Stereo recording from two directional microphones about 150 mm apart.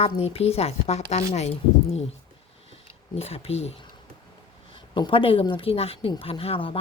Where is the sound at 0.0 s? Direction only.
40° left (ahead or behind).